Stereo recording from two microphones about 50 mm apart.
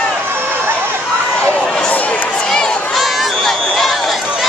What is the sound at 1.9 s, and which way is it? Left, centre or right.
Run, left.